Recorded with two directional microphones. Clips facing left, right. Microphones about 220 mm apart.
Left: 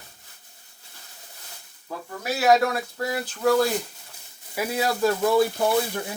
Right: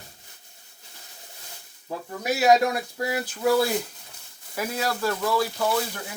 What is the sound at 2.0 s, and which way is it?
Speech, 15° right (ahead or behind).